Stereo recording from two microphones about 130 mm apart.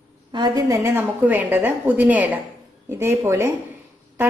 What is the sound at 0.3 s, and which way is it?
A woman's voice, 30° right (ahead or behind).